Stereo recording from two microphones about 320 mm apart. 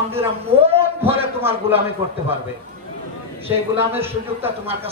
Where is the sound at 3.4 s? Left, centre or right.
Centre.